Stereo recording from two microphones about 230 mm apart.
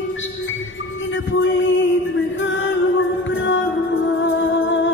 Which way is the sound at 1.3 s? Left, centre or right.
Left.